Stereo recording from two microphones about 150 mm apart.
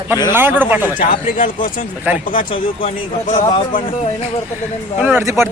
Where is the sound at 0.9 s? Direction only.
60° left (ahead or behind).